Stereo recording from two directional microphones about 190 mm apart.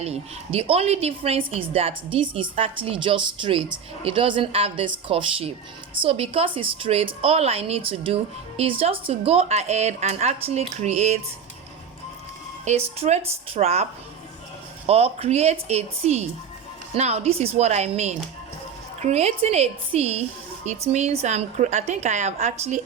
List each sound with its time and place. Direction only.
0.0 s a woman's voice: 30° right (ahead or behind)
12.6 s a woman's voice: 30° right (ahead or behind)
14.8 s a woman's voice: 30° right (ahead or behind)